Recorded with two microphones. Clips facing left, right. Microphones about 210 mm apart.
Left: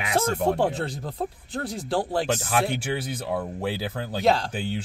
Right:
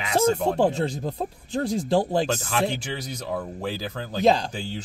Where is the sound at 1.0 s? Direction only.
20° right (ahead or behind).